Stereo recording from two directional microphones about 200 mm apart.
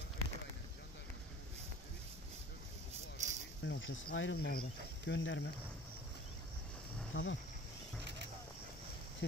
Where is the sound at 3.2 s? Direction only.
35° right (ahead or behind).